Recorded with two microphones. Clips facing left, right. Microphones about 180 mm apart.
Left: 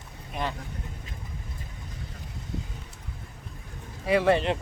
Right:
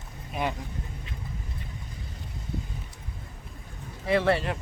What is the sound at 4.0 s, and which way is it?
Speech, 15° left (ahead or behind).